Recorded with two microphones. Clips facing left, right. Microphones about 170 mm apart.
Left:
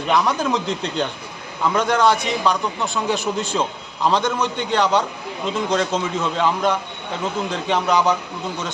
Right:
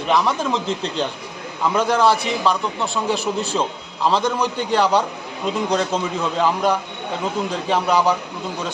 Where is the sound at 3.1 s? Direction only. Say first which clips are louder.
Right 1 dB; 35° right (ahead or behind).